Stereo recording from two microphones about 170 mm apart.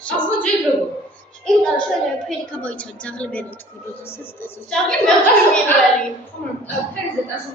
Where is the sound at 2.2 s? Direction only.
5° left (ahead or behind).